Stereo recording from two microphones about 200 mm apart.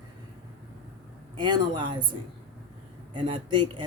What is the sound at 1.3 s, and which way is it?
Speech, 20° right (ahead or behind).